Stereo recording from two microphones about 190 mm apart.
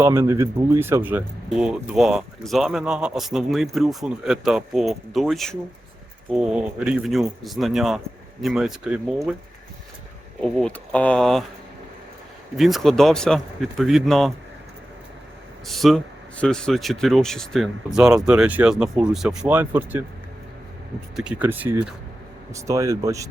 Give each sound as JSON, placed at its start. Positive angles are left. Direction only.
{"t": 0.0, "sound": "speech", "side_deg": -15}
{"t": 10.4, "sound": "speech", "side_deg": 5}
{"t": 12.5, "sound": "speech", "side_deg": 0}
{"t": 15.6, "sound": "speech", "side_deg": 0}
{"t": 21.2, "sound": "speech", "side_deg": -5}